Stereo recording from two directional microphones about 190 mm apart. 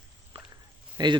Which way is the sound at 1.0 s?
20° right (ahead or behind).